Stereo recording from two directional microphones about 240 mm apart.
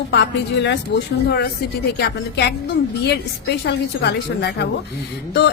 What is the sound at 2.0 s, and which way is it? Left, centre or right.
Speech, left.